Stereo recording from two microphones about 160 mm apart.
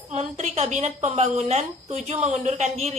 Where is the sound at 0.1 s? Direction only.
45° right (ahead or behind).